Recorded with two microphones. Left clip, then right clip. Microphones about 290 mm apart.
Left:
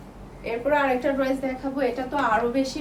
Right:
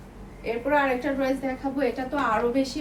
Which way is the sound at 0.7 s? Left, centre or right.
Centre.